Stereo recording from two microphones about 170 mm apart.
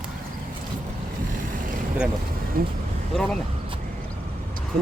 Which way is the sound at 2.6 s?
60° right (ahead or behind).